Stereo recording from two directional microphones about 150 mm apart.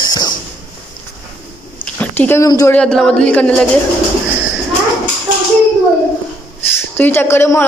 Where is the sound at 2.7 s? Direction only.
5° left (ahead or behind).